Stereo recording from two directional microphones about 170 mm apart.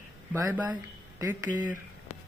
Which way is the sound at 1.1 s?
10° right (ahead or behind).